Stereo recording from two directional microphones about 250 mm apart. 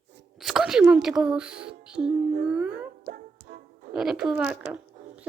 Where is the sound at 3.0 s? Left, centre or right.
Right.